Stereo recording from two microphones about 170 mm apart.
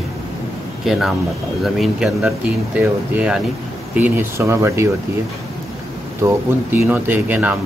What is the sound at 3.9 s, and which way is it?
Speech, 10° right (ahead or behind).